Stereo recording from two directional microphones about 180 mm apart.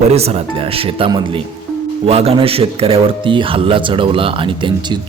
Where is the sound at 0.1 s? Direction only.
35° right (ahead or behind).